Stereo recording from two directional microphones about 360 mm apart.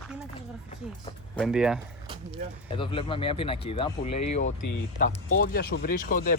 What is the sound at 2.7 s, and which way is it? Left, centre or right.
Speech, centre.